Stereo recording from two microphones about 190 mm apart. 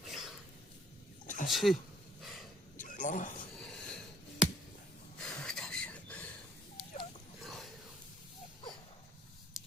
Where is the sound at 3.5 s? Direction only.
5° left (ahead or behind).